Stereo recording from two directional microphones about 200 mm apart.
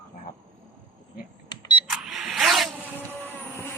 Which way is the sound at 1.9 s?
Centre (ahead or behind).